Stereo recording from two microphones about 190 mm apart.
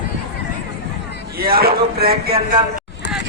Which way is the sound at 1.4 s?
55° right (ahead or behind).